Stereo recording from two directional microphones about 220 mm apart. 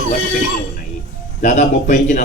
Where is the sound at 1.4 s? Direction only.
35° left (ahead or behind).